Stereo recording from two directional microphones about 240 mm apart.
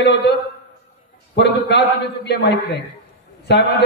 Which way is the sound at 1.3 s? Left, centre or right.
Left.